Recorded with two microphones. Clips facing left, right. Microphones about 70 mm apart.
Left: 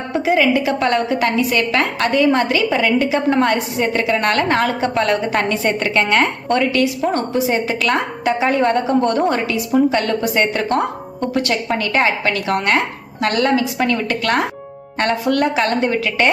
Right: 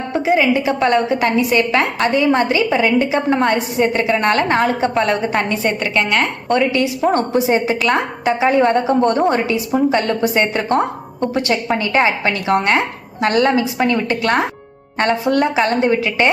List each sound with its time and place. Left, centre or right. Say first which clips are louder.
0.1 s a woman's voice: even; centre
0.5 s a woman's voice: right 2 dB; centre
6.7 s a woman's voice: right 1 dB; centre
9.0 s a woman's voice: right 2 dB; right
11.8 s a woman's voice: right 1 dB; centre